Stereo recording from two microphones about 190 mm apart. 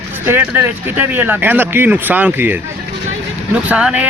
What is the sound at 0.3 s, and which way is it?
Speech, 10° right (ahead or behind).